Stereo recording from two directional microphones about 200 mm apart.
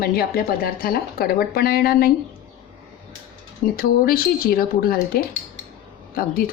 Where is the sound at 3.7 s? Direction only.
50° left (ahead or behind).